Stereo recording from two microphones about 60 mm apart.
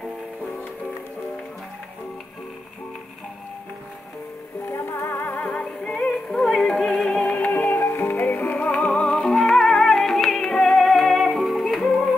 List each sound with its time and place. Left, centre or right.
4.6 s music: left
5.5 s music: centre
7.1 s music: left; by 12.1 s centre